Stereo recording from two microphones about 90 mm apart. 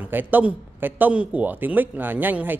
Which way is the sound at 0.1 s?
20° right (ahead or behind).